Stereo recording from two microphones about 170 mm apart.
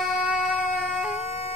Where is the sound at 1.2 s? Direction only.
40° left (ahead or behind).